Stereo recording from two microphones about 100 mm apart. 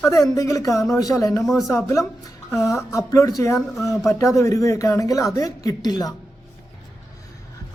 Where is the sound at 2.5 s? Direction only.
30° left (ahead or behind).